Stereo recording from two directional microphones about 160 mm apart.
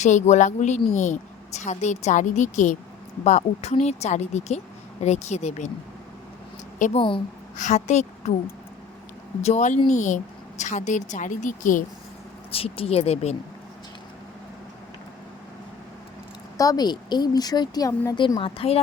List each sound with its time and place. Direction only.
0.0 s speech: 50° left (ahead or behind)
6.7 s a woman's voice: 55° left (ahead or behind)
9.4 s speech: 45° left (ahead or behind)
12.5 s speech: 35° left (ahead or behind)
16.6 s a woman's voice: 25° left (ahead or behind)
18.3 s speech: 35° left (ahead or behind)